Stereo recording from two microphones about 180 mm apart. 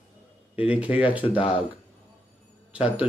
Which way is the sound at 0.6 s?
10° right (ahead or behind).